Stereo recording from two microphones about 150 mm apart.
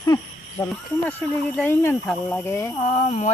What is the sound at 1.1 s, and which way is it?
Speech, 10° left (ahead or behind).